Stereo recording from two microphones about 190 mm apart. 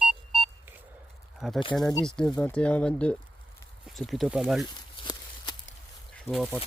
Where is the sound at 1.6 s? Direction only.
25° left (ahead or behind).